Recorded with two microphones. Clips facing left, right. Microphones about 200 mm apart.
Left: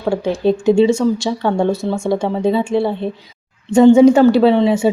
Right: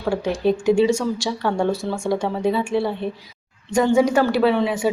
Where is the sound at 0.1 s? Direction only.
25° left (ahead or behind).